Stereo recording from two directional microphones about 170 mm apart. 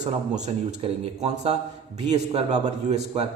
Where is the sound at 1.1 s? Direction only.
40° right (ahead or behind).